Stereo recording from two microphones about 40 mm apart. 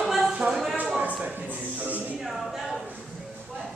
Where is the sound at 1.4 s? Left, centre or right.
Right.